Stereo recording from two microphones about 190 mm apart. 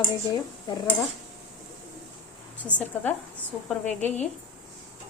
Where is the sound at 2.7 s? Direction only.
5° left (ahead or behind).